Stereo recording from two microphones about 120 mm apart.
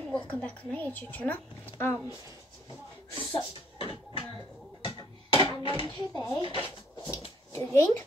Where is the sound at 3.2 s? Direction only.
15° left (ahead or behind).